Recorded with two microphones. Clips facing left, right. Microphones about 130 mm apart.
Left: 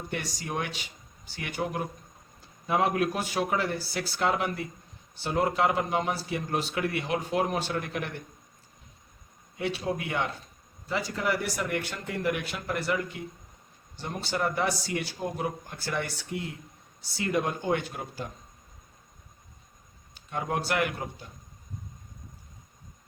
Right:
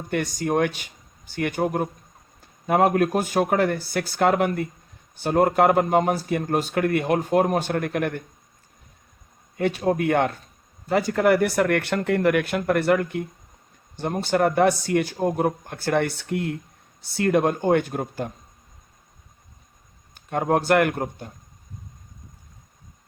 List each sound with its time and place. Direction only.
0.1 s speech: 50° right (ahead or behind)
9.6 s a man's voice: 50° right (ahead or behind)
20.1 s speech: 50° right (ahead or behind)